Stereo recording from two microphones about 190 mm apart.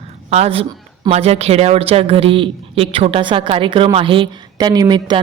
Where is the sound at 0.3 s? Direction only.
35° right (ahead or behind).